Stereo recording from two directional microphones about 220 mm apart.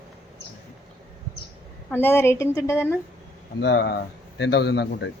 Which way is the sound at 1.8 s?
10° left (ahead or behind).